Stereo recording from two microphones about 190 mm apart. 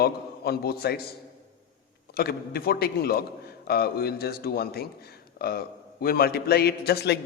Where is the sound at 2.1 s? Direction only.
55° left (ahead or behind).